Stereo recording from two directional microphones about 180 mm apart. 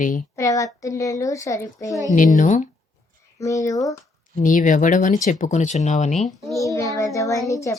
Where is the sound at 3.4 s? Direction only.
15° left (ahead or behind).